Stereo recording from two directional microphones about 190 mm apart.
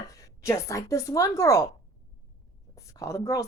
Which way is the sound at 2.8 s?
15° left (ahead or behind).